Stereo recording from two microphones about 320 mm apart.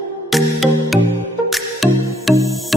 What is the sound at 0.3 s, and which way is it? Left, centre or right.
Music, centre.